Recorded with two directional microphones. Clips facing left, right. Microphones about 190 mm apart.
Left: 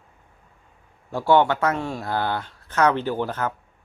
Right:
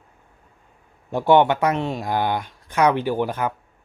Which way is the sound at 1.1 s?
20° right (ahead or behind).